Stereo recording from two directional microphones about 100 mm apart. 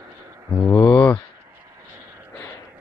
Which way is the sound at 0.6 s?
35° left (ahead or behind).